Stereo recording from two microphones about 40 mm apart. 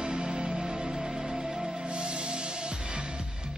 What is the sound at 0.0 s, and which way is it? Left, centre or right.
Music, right.